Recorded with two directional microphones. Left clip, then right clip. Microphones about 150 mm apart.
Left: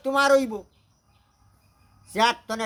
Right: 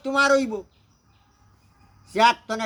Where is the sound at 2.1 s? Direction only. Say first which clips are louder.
Right 4 dB; 20° left (ahead or behind).